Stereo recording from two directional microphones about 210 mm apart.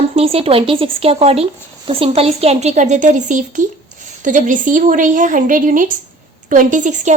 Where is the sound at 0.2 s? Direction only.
30° right (ahead or behind).